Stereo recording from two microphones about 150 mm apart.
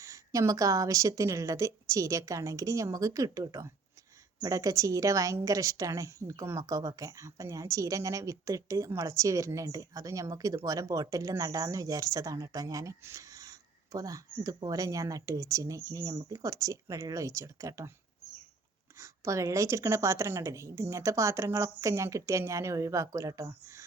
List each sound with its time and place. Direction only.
0.0 s a woman's voice: 20° right (ahead or behind)
18.9 s a woman's voice: 20° right (ahead or behind)